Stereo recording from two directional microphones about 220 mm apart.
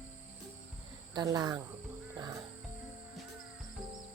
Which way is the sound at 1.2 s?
20° right (ahead or behind).